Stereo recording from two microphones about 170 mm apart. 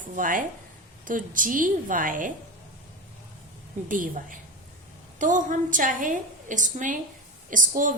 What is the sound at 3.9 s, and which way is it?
A woman's voice, 50° right (ahead or behind).